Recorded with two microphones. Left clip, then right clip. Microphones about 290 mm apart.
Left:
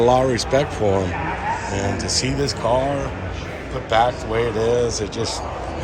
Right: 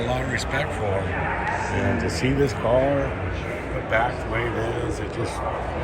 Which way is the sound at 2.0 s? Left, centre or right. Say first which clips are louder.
Left 1 dB; centre.